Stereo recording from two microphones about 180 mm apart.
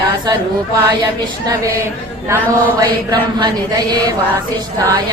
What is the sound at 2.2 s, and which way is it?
Chant, 15° right (ahead or behind).